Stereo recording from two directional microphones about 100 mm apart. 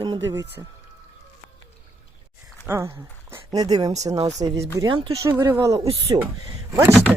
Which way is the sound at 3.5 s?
40° right (ahead or behind).